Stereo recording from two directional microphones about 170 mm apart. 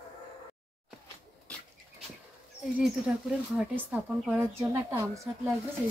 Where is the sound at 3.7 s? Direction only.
10° right (ahead or behind).